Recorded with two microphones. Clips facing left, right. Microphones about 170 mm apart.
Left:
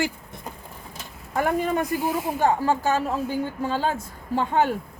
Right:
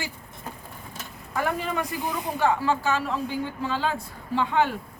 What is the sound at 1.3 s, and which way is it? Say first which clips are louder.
Speech: left 4 dB; 45° left (ahead or behind).